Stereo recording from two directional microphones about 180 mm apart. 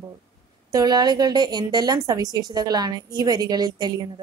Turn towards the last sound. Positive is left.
turn(degrees=-20)  # may be behind; listen again after turning